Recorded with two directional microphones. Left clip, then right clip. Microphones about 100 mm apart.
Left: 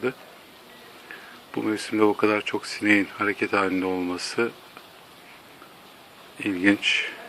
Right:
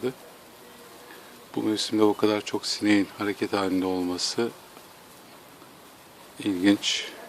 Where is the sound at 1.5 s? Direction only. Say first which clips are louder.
Even; 20° right (ahead or behind).